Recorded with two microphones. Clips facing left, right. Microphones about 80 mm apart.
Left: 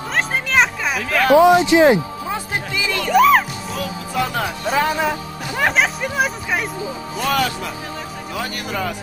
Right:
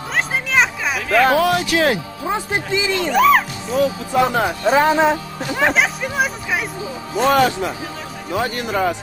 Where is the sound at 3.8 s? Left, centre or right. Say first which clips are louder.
Right 7 dB; right.